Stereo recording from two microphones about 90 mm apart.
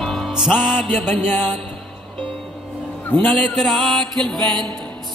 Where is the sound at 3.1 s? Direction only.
5° left (ahead or behind).